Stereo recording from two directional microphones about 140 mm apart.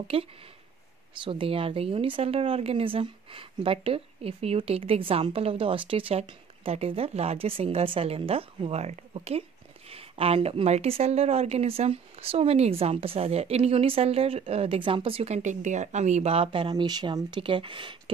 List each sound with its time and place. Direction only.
0.1 s speech: 40° right (ahead or behind)
15.2 s speech: 55° right (ahead or behind); by 18.1 s 35° right (ahead or behind)